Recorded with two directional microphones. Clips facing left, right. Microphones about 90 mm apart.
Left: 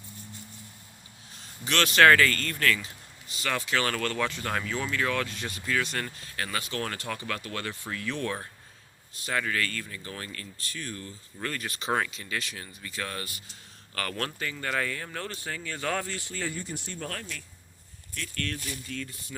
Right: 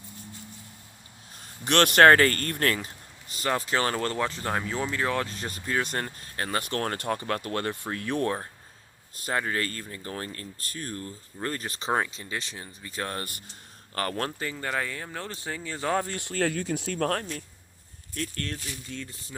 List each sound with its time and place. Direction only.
1.4 s speech: 55° right (ahead or behind)
2.0 s speech: 45° right (ahead or behind)
4.4 s speech: 20° right (ahead or behind); by 6.6 s 35° right (ahead or behind)
6.6 s speech: 55° right (ahead or behind); by 10.5 s 35° right (ahead or behind)
10.6 s speech: 45° right (ahead or behind)
11.9 s speech: 25° right (ahead or behind)
12.9 s speech: 40° right (ahead or behind)
13.9 s speech: 30° right (ahead or behind)
16.0 s speech: 50° right (ahead or behind); by 17.1 s 90° right
17.1 s speech: 40° right (ahead or behind); by 19.0 s 25° right (ahead or behind)